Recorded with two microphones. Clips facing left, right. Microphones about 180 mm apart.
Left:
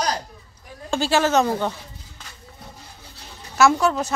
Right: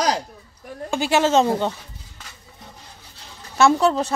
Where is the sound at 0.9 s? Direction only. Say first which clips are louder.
Right 1 dB; 20° right (ahead or behind).